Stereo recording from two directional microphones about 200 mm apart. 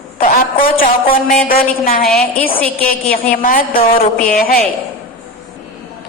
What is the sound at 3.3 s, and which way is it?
A woman's voice, 45° left (ahead or behind).